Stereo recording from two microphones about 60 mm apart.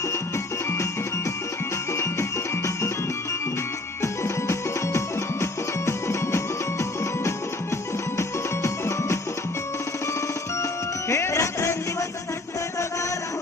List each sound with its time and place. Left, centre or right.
4.0 s music: left
11.1 s music: left